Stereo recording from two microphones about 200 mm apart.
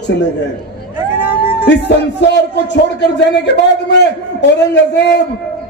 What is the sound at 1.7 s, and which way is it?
A man's voice, 60° left (ahead or behind).